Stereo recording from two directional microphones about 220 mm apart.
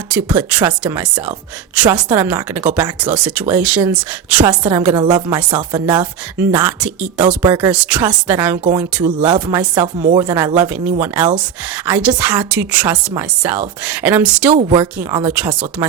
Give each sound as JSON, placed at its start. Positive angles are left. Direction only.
{"t": 0.1, "sound": "speech", "side_deg": -5}
{"t": 4.9, "sound": "speech", "side_deg": -20}
{"t": 7.4, "sound": "speech", "side_deg": -15}
{"t": 7.7, "sound": "a woman's voice", "side_deg": -5}
{"t": 9.2, "sound": "speech", "side_deg": -20}
{"t": 9.8, "sound": "a woman's voice", "side_deg": -35}
{"t": 10.2, "sound": "speech", "side_deg": -15}